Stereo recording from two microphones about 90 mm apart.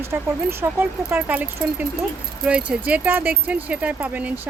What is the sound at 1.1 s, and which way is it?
Speech, 15° right (ahead or behind).